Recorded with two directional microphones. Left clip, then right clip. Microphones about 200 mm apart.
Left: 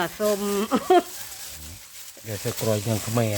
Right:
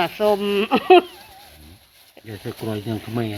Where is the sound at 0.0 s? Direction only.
Centre (ahead or behind).